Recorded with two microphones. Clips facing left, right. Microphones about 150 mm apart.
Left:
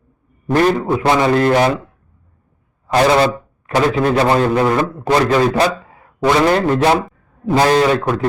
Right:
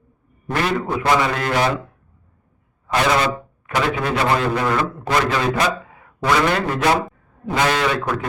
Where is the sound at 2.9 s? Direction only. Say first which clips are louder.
Left 6 dB; 35° left (ahead or behind).